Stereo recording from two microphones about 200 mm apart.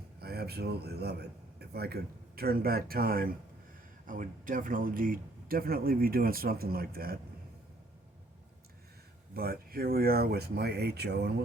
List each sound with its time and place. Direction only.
0.2 s a man's voice: 50° right (ahead or behind)
9.3 s speech: 50° right (ahead or behind)